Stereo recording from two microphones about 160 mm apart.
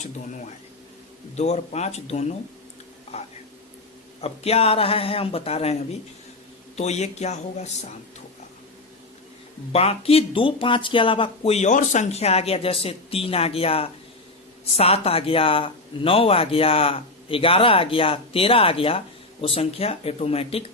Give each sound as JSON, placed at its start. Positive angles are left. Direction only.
{"t": 1.4, "sound": "speech", "side_deg": 45}
{"t": 9.7, "sound": "speech", "side_deg": 40}